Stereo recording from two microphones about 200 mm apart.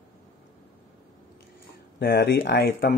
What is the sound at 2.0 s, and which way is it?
Speech, 50° left (ahead or behind).